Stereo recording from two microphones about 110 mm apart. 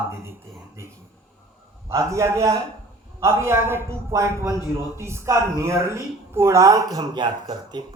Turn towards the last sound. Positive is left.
turn(degrees=-40)  # may be behind; listen again after turning